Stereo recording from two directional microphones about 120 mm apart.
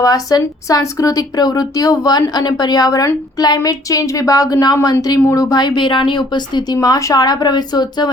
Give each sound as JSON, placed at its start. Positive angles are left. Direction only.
{"t": 0.0, "sound": "a woman's voice", "side_deg": 30}